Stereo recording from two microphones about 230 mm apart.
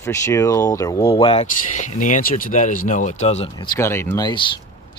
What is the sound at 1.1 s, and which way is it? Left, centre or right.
Speech, left.